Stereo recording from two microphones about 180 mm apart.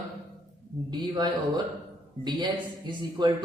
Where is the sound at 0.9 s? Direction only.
25° right (ahead or behind).